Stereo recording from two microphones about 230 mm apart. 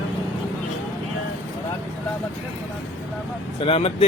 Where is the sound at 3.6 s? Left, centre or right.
Left.